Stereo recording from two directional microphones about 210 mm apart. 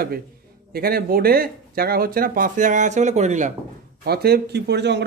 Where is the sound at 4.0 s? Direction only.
50° right (ahead or behind).